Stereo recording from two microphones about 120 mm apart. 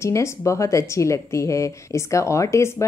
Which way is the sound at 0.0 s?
25° left (ahead or behind).